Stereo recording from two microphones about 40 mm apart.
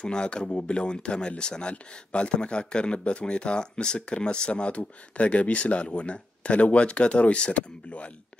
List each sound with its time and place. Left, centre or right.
0.0 s speech: left